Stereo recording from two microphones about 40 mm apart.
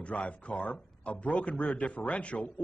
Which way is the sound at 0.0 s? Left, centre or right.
Left.